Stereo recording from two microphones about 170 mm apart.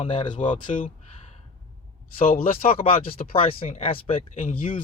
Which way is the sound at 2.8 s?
35° left (ahead or behind).